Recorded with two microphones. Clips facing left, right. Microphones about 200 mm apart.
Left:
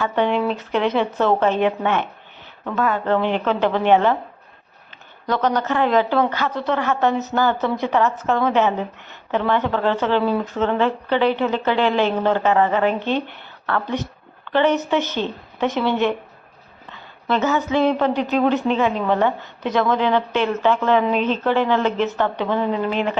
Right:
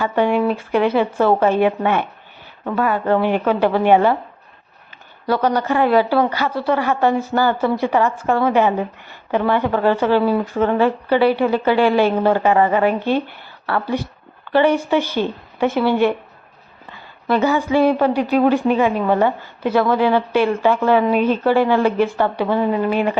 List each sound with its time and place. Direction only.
0.0 s a woman's voice: 10° right (ahead or behind)
5.2 s a woman's voice: 10° right (ahead or behind)